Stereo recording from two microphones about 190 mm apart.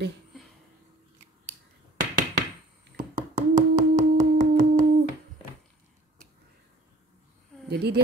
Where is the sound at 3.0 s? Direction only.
45° right (ahead or behind).